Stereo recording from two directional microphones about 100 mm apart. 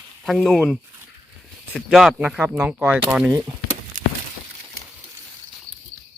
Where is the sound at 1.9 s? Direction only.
5° right (ahead or behind).